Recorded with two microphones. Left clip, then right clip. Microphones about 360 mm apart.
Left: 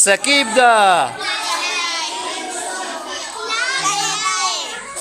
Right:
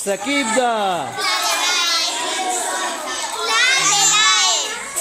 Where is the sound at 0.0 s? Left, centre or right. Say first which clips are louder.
Left 6 dB; left.